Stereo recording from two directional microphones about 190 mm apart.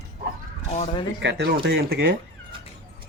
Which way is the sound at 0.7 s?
30° left (ahead or behind).